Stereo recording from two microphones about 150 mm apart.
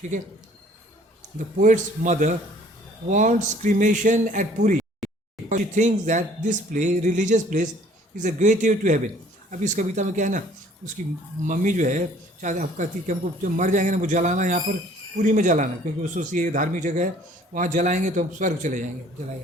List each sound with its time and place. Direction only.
1.6 s speech: 55° right (ahead or behind)
11.4 s speech: 60° right (ahead or behind)